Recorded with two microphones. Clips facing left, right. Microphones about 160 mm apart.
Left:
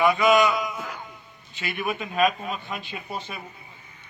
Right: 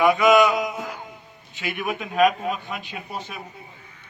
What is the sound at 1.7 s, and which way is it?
Speech, 5° right (ahead or behind).